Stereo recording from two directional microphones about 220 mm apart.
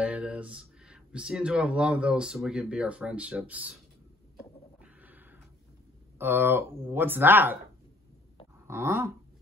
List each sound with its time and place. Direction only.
0.0 s speech: 5° right (ahead or behind)
4.8 s a sound: 10° right (ahead or behind)
6.1 s speech: 10° right (ahead or behind)
8.6 s speech: 10° right (ahead or behind)